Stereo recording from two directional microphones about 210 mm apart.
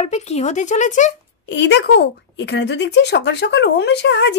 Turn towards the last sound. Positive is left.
turn(degrees=55)  # may be behind; listen again after turning